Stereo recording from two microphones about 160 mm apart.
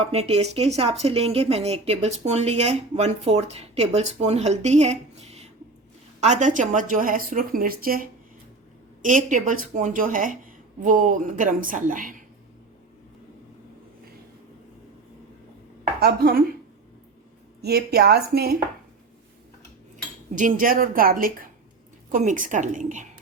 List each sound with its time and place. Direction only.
0.0 s a woman's voice: 40° right (ahead or behind); by 12.2 s 55° right (ahead or behind)
16.0 s speech: 70° right (ahead or behind)
17.6 s a woman's voice: 85° right
20.3 s a woman's voice: 55° right (ahead or behind)